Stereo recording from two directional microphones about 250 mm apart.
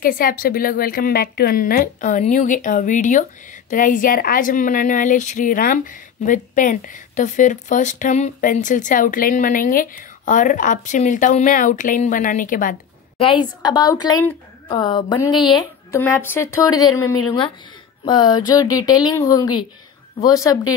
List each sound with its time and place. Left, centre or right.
0.0 s a woman's voice: left
13.2 s a woman's voice: centre